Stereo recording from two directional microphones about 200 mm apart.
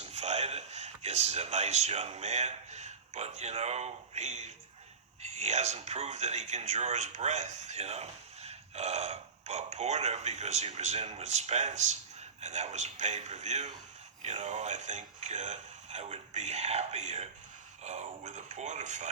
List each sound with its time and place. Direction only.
0.0 s speech: 35° right (ahead or behind)